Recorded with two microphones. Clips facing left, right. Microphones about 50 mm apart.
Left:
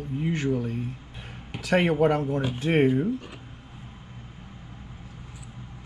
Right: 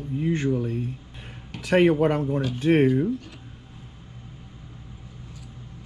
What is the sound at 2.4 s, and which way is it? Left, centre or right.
Speech, left.